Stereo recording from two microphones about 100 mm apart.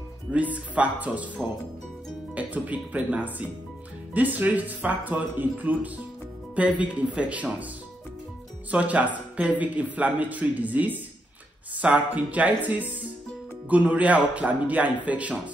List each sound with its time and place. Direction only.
0.3 s a man's voice: 15° right (ahead or behind)
8.6 s a man's voice: 15° right (ahead or behind)